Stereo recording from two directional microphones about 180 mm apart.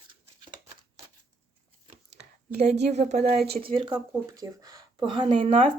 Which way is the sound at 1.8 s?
35° right (ahead or behind).